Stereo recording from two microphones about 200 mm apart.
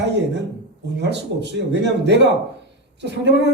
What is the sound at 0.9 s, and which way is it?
A man's voice, 60° right (ahead or behind).